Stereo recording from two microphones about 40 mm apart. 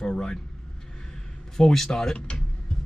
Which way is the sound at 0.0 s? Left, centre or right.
Centre.